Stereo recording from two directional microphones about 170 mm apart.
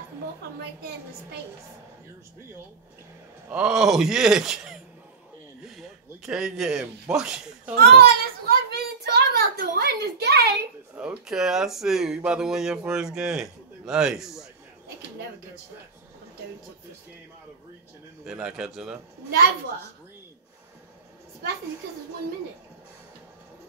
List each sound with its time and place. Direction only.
3.4 s speech: 5° right (ahead or behind)
5.8 s speech: centre (ahead or behind)
7.8 s a sound: 65° right (ahead or behind)
11.0 s speech: 5° right (ahead or behind)
18.2 s speech: 5° right (ahead or behind)